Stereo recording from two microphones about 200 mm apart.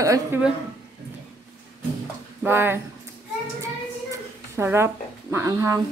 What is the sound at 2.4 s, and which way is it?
Speech, 10° right (ahead or behind).